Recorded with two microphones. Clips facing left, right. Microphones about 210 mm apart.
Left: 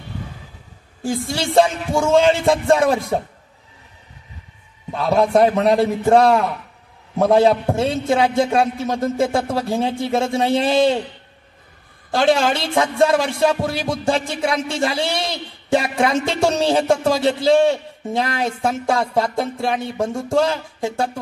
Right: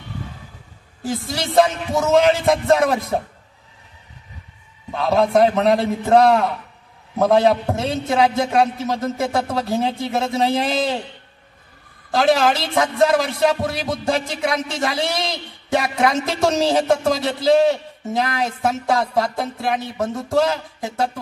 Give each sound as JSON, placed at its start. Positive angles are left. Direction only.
{"t": 1.0, "sound": "speech", "side_deg": 30}
{"t": 4.9, "sound": "speech", "side_deg": 30}
{"t": 12.1, "sound": "speech", "side_deg": 30}